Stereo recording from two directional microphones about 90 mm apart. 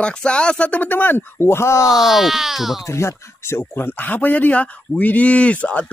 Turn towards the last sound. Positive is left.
turn(degrees=15)  # may be behind; listen again after turning